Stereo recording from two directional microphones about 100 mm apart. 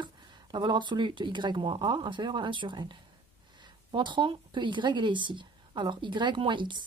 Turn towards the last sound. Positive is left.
turn(degrees=-55)  # may be behind; listen again after turning